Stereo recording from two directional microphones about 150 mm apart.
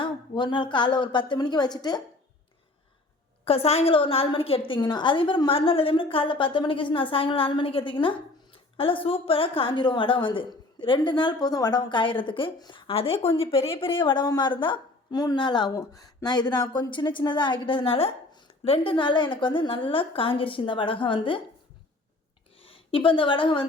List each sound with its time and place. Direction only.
0.0 s a woman's voice: 30° left (ahead or behind)
3.4 s a woman's voice: 40° left (ahead or behind)
22.6 s a woman's voice: 40° left (ahead or behind)